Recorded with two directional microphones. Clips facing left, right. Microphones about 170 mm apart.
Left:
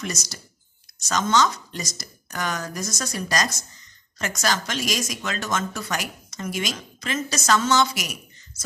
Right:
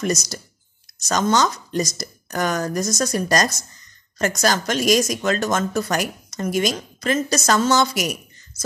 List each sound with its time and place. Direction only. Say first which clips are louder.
0.0 s speech: right 9 dB; 40° right (ahead or behind)